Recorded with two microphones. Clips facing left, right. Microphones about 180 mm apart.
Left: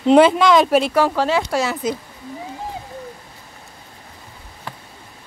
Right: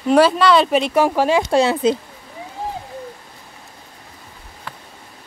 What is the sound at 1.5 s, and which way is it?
Speech, 30° right (ahead or behind).